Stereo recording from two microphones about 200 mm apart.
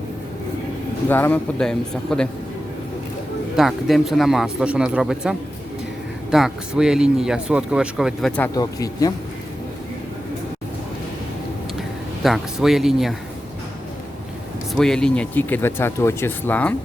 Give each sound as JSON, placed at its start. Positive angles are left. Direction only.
{"t": 1.0, "sound": "speech", "side_deg": 10}
{"t": 3.5, "sound": "speech", "side_deg": 0}
{"t": 8.4, "sound": "speech", "side_deg": 15}
{"t": 11.8, "sound": "speech", "side_deg": 0}
{"t": 14.8, "sound": "speech", "side_deg": 5}